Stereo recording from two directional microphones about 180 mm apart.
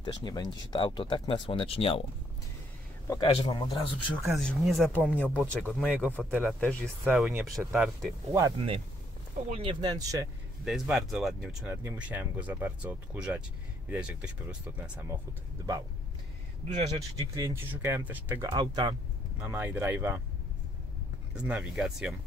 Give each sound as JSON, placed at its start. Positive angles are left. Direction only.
{"t": 0.0, "sound": "speech", "side_deg": 25}
{"t": 3.1, "sound": "speech", "side_deg": 25}
{"t": 4.3, "sound": "speech", "side_deg": 0}
{"t": 6.6, "sound": "speech", "side_deg": 5}
{"t": 8.3, "sound": "speech", "side_deg": -15}
{"t": 8.5, "sound": "speech", "side_deg": -30}
{"t": 10.6, "sound": "speech", "side_deg": 0}
{"t": 11.6, "sound": "speech", "side_deg": -15}
{"t": 16.6, "sound": "speech", "side_deg": -30}
{"t": 17.4, "sound": "speech", "side_deg": -15}
{"t": 19.4, "sound": "speech", "side_deg": -10}
{"t": 21.4, "sound": "speech", "side_deg": -5}